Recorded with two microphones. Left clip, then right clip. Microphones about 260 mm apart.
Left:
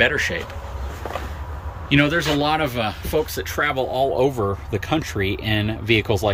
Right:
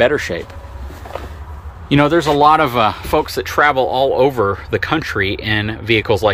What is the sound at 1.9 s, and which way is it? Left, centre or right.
Speech, centre.